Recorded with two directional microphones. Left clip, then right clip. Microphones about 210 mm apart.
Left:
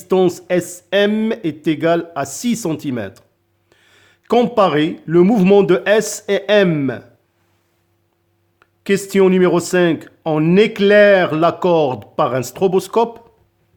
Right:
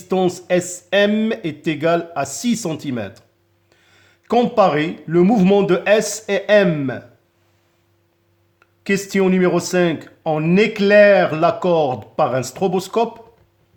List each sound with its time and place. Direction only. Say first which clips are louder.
0.1 s speech: left 3 dB; 25° left (ahead or behind)
8.5 s speech: left 3 dB; 25° left (ahead or behind)